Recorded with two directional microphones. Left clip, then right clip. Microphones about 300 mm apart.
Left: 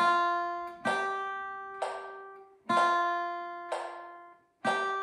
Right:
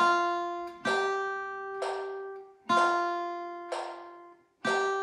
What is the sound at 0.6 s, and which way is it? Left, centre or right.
Music, centre.